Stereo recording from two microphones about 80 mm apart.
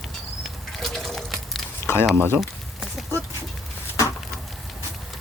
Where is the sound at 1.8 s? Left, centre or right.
Left.